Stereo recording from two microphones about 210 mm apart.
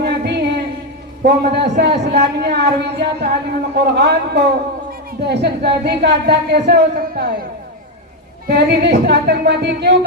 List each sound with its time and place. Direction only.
0.0 s a sound: 50° right (ahead or behind)
1.2 s speech: 50° right (ahead or behind)
8.4 s speech: 50° right (ahead or behind)